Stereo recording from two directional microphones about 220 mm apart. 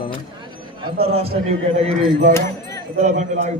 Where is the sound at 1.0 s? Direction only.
25° right (ahead or behind).